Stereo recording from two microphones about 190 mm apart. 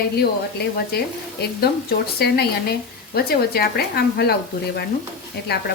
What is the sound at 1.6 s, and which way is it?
A woman's voice, 55° left (ahead or behind).